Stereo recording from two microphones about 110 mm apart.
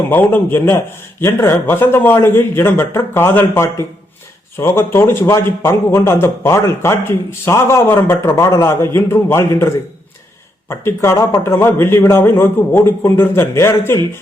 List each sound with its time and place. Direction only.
0.1 s a man's voice: 15° left (ahead or behind)
10.7 s speech: 25° left (ahead or behind)